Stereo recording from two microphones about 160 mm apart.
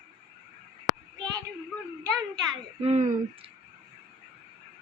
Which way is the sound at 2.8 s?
45° right (ahead or behind).